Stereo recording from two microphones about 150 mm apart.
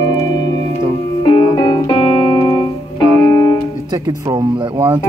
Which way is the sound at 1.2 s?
30° left (ahead or behind).